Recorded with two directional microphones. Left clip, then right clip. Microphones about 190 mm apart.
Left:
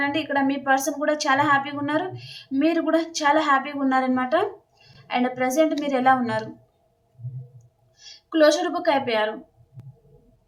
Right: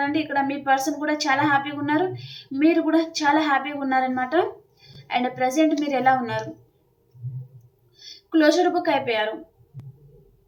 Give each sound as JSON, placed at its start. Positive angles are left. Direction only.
{"t": 0.1, "sound": "a woman's voice", "side_deg": 20}
{"t": 8.3, "sound": "a woman's voice", "side_deg": 20}